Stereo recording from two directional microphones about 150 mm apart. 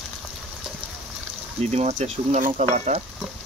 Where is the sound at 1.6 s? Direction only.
45° right (ahead or behind).